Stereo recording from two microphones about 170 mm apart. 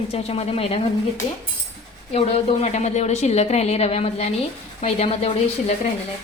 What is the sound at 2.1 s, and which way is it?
A woman's voice, 40° left (ahead or behind).